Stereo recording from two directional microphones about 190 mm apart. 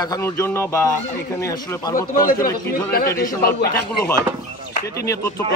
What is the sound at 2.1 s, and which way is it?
A man's voice, 50° left (ahead or behind).